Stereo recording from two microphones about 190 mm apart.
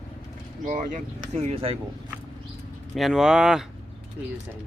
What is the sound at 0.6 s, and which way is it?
Speech, 45° right (ahead or behind).